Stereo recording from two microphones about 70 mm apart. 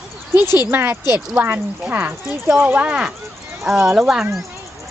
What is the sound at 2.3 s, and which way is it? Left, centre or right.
Speech, centre.